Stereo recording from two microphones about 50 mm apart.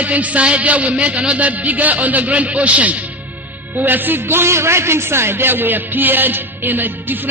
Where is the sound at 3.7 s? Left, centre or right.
Right.